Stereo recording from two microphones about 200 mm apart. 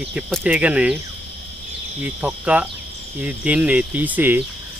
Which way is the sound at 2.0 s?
5° right (ahead or behind).